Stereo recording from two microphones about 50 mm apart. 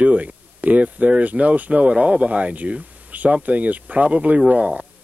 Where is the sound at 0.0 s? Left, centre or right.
Right.